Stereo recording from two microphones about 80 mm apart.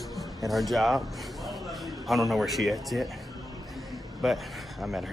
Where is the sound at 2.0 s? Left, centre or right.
Centre.